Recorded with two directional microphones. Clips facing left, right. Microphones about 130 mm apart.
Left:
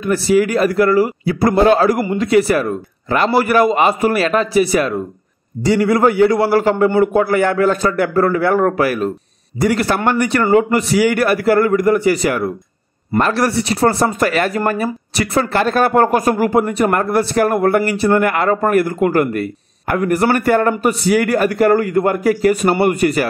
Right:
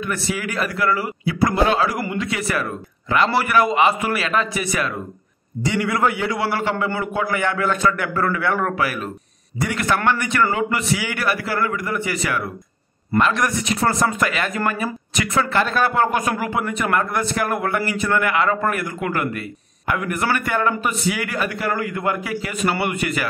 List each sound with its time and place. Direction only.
0.0 s speech: 35° left (ahead or behind)